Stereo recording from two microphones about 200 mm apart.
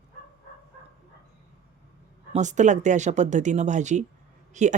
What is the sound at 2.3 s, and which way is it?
Speech, 35° right (ahead or behind).